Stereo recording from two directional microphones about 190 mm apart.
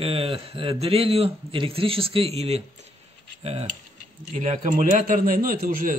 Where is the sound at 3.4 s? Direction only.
30° right (ahead or behind).